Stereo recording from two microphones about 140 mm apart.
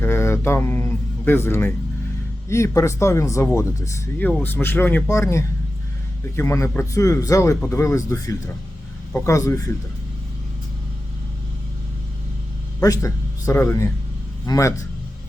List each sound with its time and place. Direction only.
0.0 s speech: 20° left (ahead or behind)
12.8 s speech: 25° left (ahead or behind)